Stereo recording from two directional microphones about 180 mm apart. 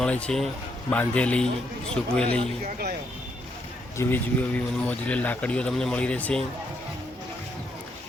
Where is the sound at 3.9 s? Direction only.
10° left (ahead or behind).